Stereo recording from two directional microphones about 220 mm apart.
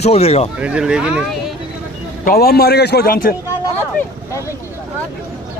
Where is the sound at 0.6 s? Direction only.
5° right (ahead or behind).